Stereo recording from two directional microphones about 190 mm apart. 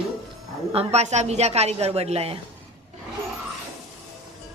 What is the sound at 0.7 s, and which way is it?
A woman's voice, 35° right (ahead or behind).